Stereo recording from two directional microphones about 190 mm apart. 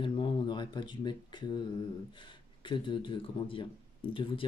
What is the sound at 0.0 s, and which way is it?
Speech, 25° left (ahead or behind).